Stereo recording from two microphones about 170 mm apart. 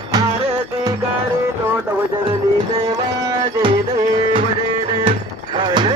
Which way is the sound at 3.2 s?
30° right (ahead or behind).